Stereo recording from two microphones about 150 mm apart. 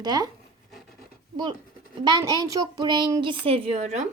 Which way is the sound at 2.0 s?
30° right (ahead or behind).